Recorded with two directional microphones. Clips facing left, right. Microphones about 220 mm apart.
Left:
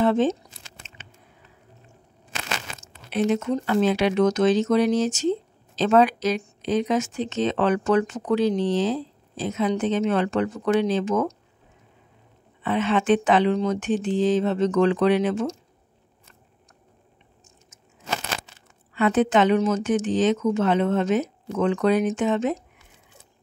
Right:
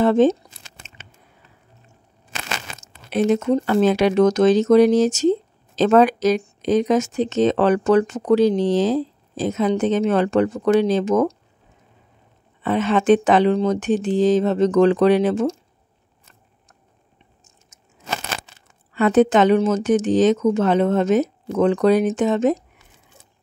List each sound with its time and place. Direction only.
0.0 s speech: 45° right (ahead or behind)
2.8 s speech: 40° right (ahead or behind)
12.6 s speech: 40° right (ahead or behind)
18.9 s speech: 40° right (ahead or behind)